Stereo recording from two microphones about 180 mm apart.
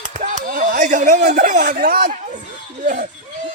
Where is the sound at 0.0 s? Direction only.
50° right (ahead or behind).